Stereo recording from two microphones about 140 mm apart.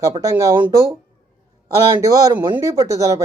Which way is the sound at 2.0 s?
25° right (ahead or behind).